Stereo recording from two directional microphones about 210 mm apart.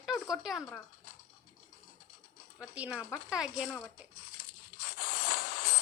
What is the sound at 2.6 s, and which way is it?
Speech, 5° right (ahead or behind).